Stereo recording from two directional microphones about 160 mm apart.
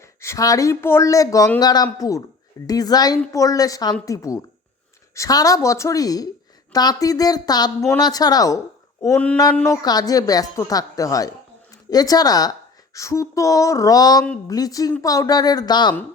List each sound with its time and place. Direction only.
0.2 s a woman's voice: 20° left (ahead or behind)
9.0 s mantra: 10° left (ahead or behind)
9.6 s a woman's voice: 20° left (ahead or behind)